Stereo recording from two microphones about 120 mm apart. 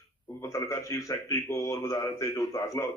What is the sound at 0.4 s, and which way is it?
Speech, 25° left (ahead or behind).